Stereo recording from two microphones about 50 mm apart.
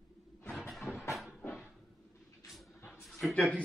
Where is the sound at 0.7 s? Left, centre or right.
Centre.